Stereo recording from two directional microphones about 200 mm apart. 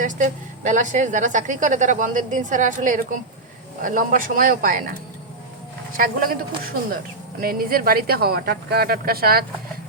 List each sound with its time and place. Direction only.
0.0 s a woman's voice: 40° right (ahead or behind)
6.0 s speech: 45° right (ahead or behind)
7.4 s speech: 45° right (ahead or behind)